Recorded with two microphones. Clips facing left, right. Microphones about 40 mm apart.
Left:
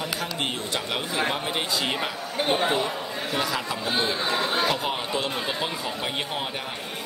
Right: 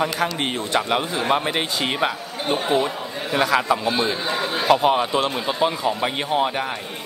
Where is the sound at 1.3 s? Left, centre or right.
Right.